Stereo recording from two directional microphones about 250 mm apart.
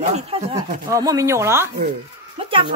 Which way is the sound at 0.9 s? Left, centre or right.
Centre.